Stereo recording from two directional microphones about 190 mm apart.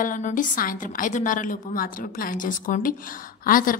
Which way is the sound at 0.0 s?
45° left (ahead or behind).